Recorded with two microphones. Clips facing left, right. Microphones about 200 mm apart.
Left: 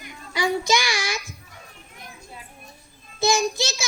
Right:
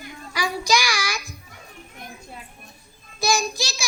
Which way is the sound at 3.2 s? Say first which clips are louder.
Left 2 dB; 25° left (ahead or behind).